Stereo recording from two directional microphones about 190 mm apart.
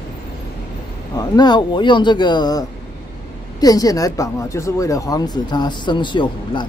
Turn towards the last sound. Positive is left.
turn(degrees=25)  # may be behind; listen again after turning